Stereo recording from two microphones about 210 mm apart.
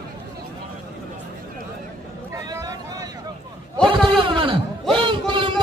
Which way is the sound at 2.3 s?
15° right (ahead or behind).